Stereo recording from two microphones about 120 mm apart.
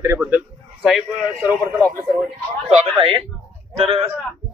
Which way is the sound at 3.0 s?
45° right (ahead or behind).